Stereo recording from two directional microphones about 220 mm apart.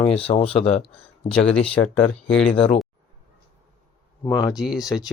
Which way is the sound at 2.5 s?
25° left (ahead or behind).